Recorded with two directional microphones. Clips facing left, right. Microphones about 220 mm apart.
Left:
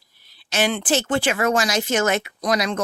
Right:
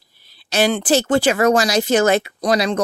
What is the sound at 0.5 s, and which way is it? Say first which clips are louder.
Speech: right 5 dB; 40° right (ahead or behind).